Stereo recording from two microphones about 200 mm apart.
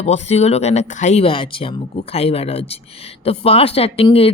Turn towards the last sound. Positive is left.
turn(degrees=30)  # may be behind; listen again after turning